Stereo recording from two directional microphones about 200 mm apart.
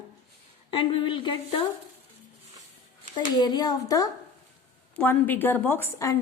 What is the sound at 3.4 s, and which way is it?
A woman's voice, 20° left (ahead or behind).